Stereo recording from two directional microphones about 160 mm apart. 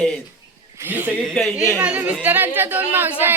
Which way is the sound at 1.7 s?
10° right (ahead or behind).